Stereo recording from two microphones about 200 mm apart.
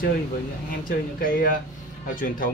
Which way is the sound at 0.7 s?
45° left (ahead or behind).